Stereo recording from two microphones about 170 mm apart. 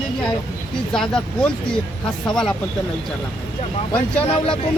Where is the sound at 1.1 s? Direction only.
5° left (ahead or behind).